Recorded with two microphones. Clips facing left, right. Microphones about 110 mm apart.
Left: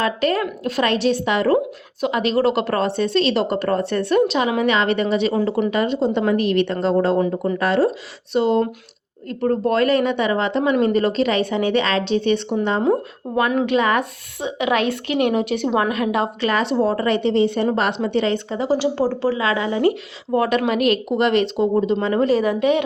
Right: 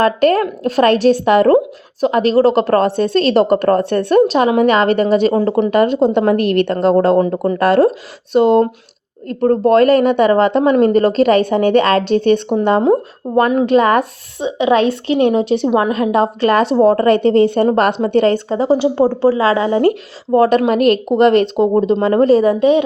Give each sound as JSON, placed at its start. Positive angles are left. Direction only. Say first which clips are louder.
{"t": 0.0, "sound": "a woman's voice", "louder": "right 7 dB", "side_deg": -50}
{"t": 5.7, "sound": "a woman's voice", "louder": "right 7 dB", "side_deg": -50}
{"t": 13.2, "sound": "a woman's voice", "louder": "right 8 dB", "side_deg": -30}
{"t": 13.6, "sound": "a woman's voice", "louder": "right 6 dB", "side_deg": -40}
{"t": 14.4, "sound": "a woman's voice", "louder": "right 7 dB", "side_deg": -30}